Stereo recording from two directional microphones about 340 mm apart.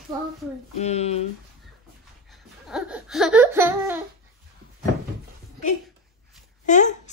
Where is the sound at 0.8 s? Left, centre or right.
Centre.